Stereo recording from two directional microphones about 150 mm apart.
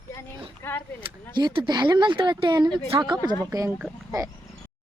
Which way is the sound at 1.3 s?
30° right (ahead or behind).